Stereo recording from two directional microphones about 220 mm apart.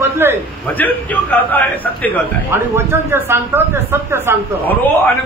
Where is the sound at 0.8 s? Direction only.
5° left (ahead or behind).